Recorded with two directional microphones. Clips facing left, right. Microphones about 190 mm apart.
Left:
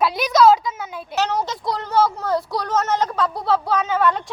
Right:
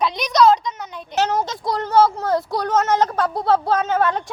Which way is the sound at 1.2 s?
50° right (ahead or behind).